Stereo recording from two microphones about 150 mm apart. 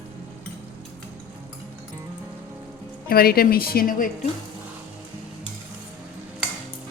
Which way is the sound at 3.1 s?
90° left.